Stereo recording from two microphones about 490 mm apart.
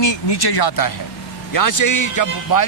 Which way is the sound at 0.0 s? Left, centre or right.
Left.